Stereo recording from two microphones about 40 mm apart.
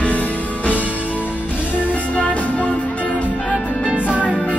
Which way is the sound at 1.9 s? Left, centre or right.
Left.